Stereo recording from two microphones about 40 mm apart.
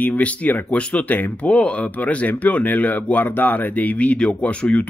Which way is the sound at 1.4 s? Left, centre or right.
Left.